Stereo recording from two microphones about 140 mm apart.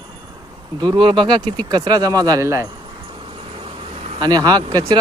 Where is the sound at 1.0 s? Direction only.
40° right (ahead or behind); by 2.7 s 20° right (ahead or behind).